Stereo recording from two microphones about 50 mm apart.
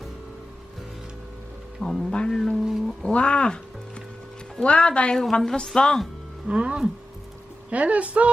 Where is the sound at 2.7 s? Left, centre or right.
Centre.